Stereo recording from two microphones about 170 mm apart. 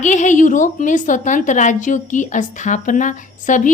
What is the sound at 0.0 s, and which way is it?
A woman's voice, 45° left (ahead or behind).